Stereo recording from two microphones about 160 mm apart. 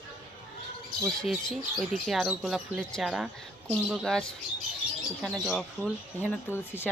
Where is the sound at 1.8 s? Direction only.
Centre (ahead or behind).